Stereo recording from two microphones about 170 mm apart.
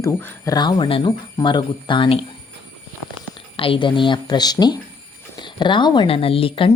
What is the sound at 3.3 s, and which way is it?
Speech, 30° left (ahead or behind).